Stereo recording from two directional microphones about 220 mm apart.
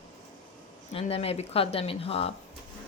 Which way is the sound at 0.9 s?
25° left (ahead or behind).